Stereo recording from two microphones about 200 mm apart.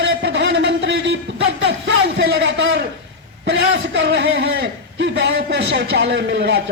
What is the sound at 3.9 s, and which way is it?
A man's voice, 65° right (ahead or behind).